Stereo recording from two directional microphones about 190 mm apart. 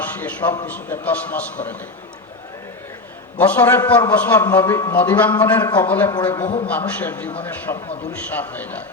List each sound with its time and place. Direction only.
0.0 s a sound: 10° left (ahead or behind)
0.7 s a man's voice: 10° left (ahead or behind)
3.3 s a man's voice: 10° left (ahead or behind)
6.1 s a man's voice: 25° left (ahead or behind)
6.7 s a man's voice: 10° left (ahead or behind)